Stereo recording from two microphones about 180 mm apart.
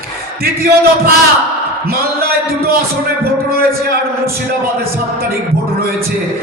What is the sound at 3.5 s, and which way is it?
Speech, 60° right (ahead or behind).